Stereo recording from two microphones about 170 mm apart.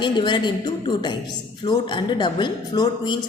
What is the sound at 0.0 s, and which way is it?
A woman's voice, 25° left (ahead or behind).